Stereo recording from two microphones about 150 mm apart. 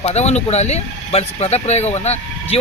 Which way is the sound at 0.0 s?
45° left (ahead or behind).